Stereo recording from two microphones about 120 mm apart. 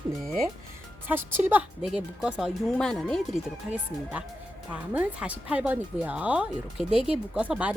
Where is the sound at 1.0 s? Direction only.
15° right (ahead or behind).